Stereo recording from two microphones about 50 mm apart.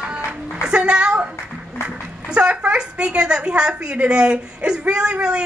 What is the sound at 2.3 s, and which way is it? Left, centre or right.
A woman's voice, right.